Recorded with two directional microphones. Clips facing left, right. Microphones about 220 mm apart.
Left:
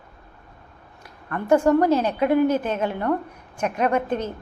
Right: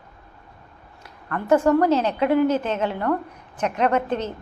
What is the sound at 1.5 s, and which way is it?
A woman's voice, 15° left (ahead or behind).